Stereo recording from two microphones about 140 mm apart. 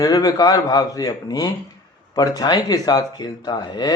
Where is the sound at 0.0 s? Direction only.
25° left (ahead or behind).